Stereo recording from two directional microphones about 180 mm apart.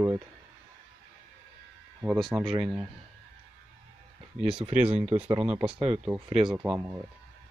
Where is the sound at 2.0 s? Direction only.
5° right (ahead or behind).